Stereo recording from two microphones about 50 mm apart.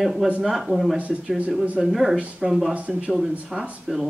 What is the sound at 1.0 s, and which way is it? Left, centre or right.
Speech, right.